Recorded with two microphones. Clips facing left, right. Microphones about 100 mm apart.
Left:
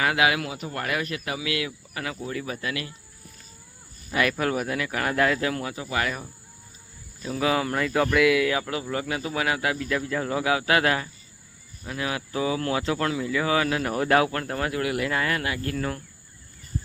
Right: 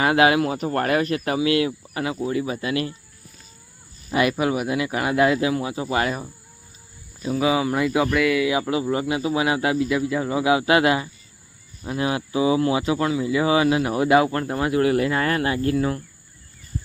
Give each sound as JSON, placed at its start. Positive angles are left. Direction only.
{"t": 0.0, "sound": "speech", "side_deg": -30}
{"t": 4.1, "sound": "speech", "side_deg": -20}
{"t": 5.7, "sound": "speech", "side_deg": -25}
{"t": 7.2, "sound": "speech", "side_deg": -10}
{"t": 8.4, "sound": "speech", "side_deg": -20}
{"t": 10.5, "sound": "speech", "side_deg": -20}
{"t": 12.3, "sound": "speech", "side_deg": -15}
{"t": 13.3, "sound": "speech", "side_deg": -20}
{"t": 14.8, "sound": "speech", "side_deg": -35}